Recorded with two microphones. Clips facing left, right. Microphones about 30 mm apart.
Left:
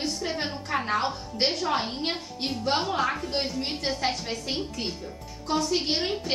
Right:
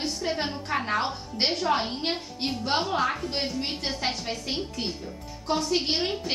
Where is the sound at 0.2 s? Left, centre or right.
Centre.